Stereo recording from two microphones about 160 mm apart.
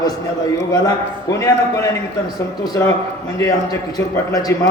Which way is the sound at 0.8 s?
20° left (ahead or behind).